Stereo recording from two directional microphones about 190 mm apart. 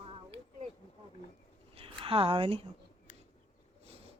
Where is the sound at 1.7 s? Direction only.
30° right (ahead or behind).